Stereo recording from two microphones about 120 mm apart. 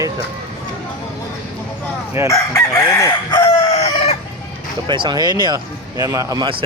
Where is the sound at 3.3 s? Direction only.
45° left (ahead or behind); by 4.2 s 65° left (ahead or behind).